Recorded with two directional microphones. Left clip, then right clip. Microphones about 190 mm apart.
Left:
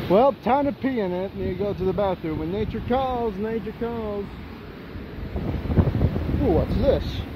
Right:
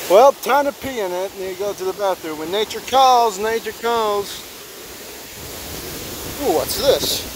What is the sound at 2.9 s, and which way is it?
Speech, 35° right (ahead or behind).